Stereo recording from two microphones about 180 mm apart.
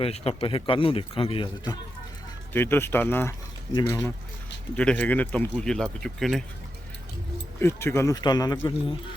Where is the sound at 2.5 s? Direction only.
10° left (ahead or behind).